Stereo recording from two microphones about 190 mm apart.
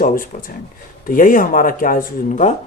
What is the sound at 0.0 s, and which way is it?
Speech, 45° left (ahead or behind).